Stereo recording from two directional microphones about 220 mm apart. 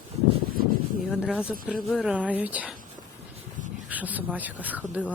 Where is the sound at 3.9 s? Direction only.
5° right (ahead or behind).